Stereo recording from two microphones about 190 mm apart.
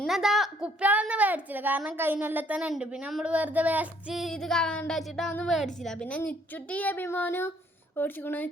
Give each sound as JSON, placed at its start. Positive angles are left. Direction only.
{"t": 0.0, "sound": "a woman's voice", "side_deg": 0}